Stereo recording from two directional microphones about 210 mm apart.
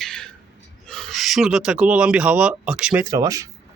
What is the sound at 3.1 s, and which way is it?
Speech, 15° right (ahead or behind).